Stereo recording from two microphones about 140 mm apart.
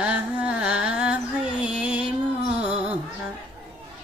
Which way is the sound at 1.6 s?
10° right (ahead or behind).